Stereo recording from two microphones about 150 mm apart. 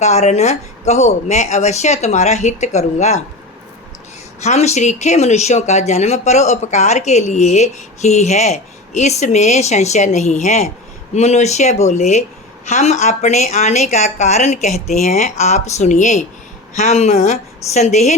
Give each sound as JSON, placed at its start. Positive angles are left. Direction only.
{"t": 0.0, "sound": "speech", "side_deg": 50}
{"t": 4.4, "sound": "speech", "side_deg": 50}